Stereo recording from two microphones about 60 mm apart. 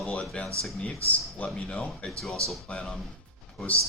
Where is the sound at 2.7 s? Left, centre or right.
Centre.